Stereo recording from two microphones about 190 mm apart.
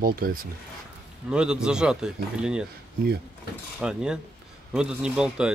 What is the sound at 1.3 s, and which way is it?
Speech, 5° right (ahead or behind).